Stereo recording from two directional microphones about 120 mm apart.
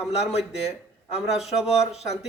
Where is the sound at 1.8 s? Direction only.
60° left (ahead or behind).